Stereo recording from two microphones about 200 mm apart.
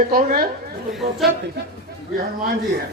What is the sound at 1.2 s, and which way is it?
Speech, centre (ahead or behind).